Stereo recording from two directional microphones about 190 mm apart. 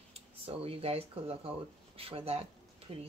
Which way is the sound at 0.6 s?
30° right (ahead or behind).